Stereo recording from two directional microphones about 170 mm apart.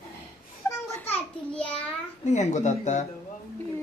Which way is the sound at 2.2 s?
45° left (ahead or behind).